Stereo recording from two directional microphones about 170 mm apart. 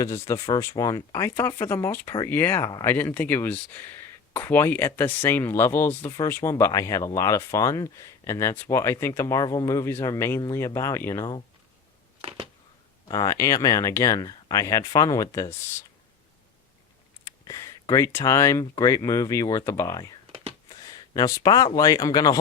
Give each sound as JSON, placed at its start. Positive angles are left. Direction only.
{"t": 0.0, "sound": "speech", "side_deg": 15}
{"t": 13.1, "sound": "speech", "side_deg": 20}
{"t": 17.2, "sound": "speech", "side_deg": 20}